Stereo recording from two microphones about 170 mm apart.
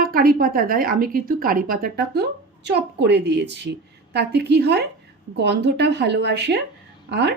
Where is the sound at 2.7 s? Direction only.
90° right.